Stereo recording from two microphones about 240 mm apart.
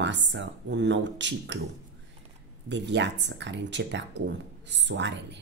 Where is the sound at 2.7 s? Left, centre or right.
Right.